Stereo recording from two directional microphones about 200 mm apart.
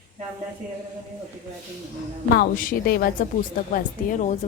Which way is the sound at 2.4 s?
50° left (ahead or behind).